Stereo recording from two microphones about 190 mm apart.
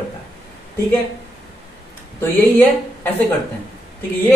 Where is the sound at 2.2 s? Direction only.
10° left (ahead or behind).